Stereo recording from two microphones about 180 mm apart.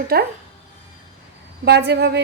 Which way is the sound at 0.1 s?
60° right (ahead or behind).